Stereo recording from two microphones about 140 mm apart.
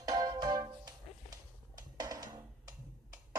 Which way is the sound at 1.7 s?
25° right (ahead or behind).